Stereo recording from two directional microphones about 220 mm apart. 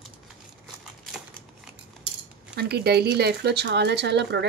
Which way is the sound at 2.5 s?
50° right (ahead or behind).